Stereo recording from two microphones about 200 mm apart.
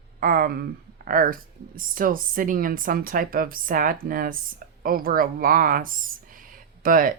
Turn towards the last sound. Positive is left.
turn(degrees=-45)  # may be behind; listen again after turning